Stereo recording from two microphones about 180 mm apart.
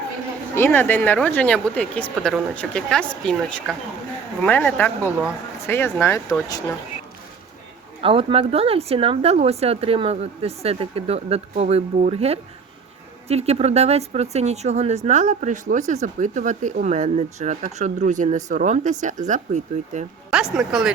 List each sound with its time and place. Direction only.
0.5 s speech: 10° left (ahead or behind)
5.0 s speech: 10° right (ahead or behind)
5.6 s speech: 15° left (ahead or behind)
8.0 s speech: 30° right (ahead or behind)
20.3 s speech: 5° right (ahead or behind)